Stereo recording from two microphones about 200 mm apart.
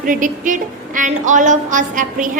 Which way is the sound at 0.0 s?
40° right (ahead or behind).